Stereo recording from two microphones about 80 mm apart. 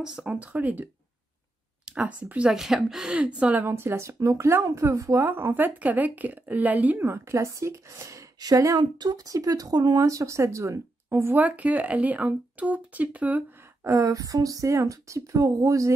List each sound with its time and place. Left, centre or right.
0.0 s speech: centre
1.9 s speech: centre
3.6 s speech: right
7.1 s a woman's voice: right
11.3 s speech: centre
13.8 s a woman's voice: right